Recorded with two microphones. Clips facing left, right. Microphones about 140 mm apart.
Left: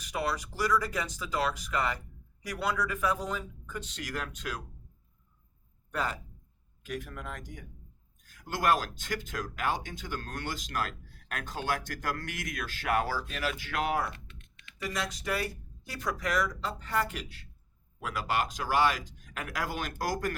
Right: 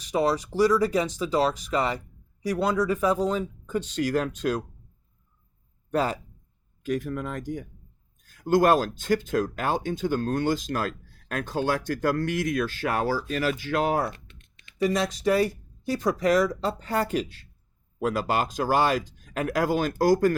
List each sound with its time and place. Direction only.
0.1 s speech: 30° right (ahead or behind)
5.9 s speech: 30° right (ahead or behind)
8.6 s speech: 30° right (ahead or behind)